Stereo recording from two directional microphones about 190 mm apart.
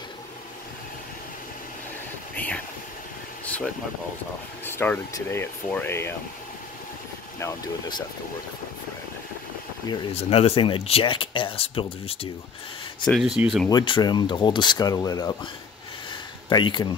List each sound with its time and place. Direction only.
2.3 s vehicle: 10° left (ahead or behind)
4.6 s speech: 10° left (ahead or behind)
7.3 s speech: 20° left (ahead or behind)
10.1 s speech: 30° left (ahead or behind)
13.0 s speech: centre (ahead or behind)
13.7 s speech: 25° left (ahead or behind)
16.1 s a sound: 25° left (ahead or behind)